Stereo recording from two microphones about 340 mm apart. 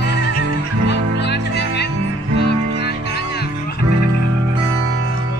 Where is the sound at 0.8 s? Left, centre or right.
Left.